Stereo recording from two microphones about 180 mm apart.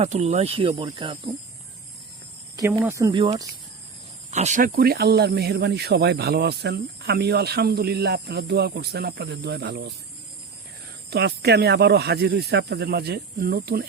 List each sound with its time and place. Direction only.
0.0 s speech: 35° right (ahead or behind)
2.6 s speech: 15° right (ahead or behind)
4.3 s speech: 40° right (ahead or behind); by 9.9 s 65° right (ahead or behind)
11.1 s speech: 65° right (ahead or behind)